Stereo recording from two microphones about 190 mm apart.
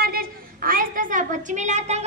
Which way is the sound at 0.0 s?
50° right (ahead or behind).